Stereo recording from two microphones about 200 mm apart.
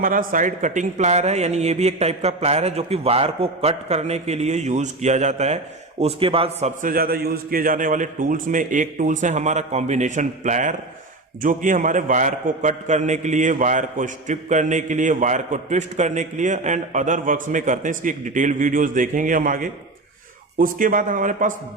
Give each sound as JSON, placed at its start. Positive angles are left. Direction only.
{"t": 0.0, "sound": "a man's voice", "side_deg": -45}